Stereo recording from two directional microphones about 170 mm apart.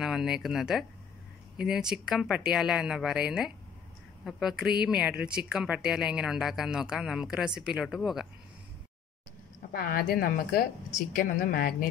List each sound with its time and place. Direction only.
0.0 s speech: 5° right (ahead or behind)
9.7 s a woman's voice: 60° left (ahead or behind)